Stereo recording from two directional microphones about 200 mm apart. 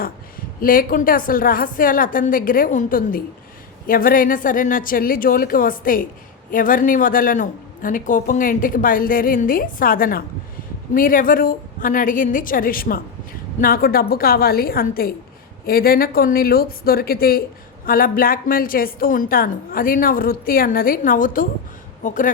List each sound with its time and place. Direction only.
0.6 s a man's voice: 45° left (ahead or behind)